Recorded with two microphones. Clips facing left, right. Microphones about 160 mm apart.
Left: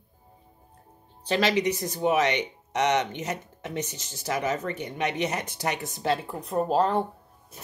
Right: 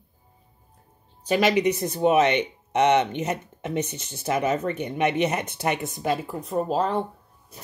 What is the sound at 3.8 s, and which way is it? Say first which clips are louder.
Speech: right 4 dB; 60° right (ahead or behind).